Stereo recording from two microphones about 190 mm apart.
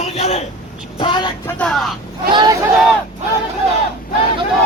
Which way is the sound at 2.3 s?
20° right (ahead or behind).